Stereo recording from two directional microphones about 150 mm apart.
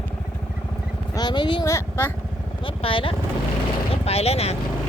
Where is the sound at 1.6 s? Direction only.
15° left (ahead or behind).